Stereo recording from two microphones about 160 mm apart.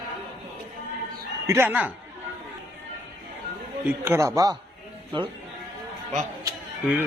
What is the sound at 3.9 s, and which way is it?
A man's voice, 15° right (ahead or behind).